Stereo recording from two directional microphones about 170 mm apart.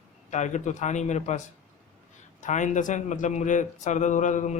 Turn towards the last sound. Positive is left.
turn(degrees=45)  # may be behind; listen again after turning